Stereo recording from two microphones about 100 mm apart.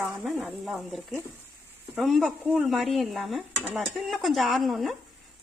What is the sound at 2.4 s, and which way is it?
Speech, 20° right (ahead or behind).